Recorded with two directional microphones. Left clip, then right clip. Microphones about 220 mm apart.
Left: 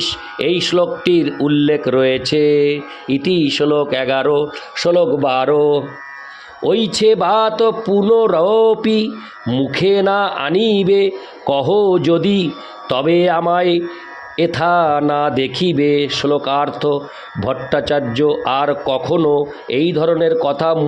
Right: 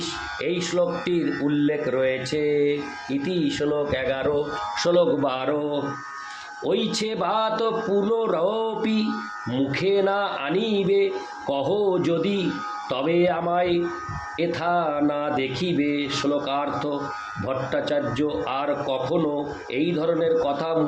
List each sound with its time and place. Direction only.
0.0 s speech: 45° left (ahead or behind)
4.8 s speech: 35° left (ahead or behind)